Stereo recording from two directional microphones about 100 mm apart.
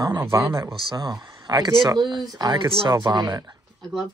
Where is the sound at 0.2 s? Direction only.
35° right (ahead or behind).